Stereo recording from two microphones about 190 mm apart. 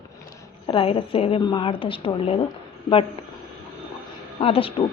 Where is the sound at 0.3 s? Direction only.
15° left (ahead or behind).